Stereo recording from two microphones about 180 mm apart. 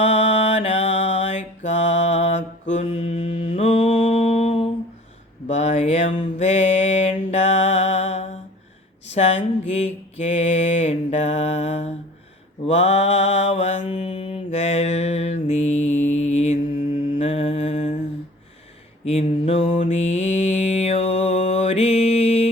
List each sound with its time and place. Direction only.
0.0 s mantra: 35° left (ahead or behind)
5.5 s a sound: 35° left (ahead or behind)
6.4 s mantra: 35° left (ahead or behind)
19.0 s mantra: 35° left (ahead or behind)